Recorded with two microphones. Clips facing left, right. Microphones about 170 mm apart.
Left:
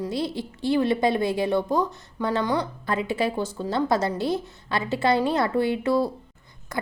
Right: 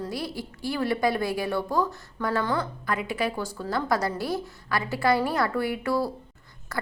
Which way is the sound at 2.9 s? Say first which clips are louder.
Left 4 dB; 25° left (ahead or behind).